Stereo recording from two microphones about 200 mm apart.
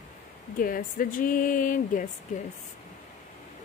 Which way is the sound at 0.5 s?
45° left (ahead or behind).